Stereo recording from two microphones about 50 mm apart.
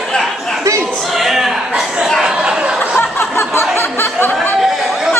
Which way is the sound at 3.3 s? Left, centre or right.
Left.